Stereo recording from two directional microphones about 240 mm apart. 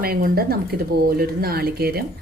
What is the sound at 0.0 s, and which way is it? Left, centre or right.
Speech, right.